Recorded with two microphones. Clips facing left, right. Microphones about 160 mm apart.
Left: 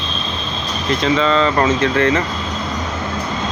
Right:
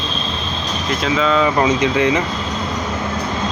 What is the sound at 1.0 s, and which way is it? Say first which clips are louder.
Speech: left 1 dB; 5° right (ahead or behind).